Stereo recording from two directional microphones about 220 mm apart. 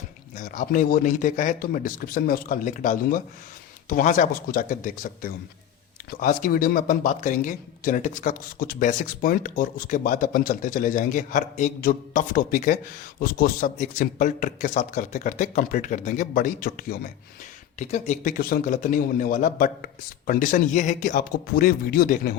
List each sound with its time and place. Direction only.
0.3 s speech: 35° left (ahead or behind)